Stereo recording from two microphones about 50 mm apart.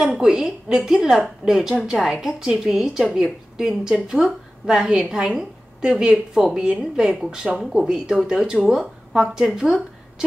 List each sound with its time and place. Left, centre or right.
0.0 s a woman's voice: centre